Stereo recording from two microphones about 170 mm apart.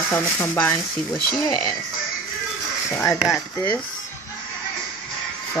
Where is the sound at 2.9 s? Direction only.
15° left (ahead or behind).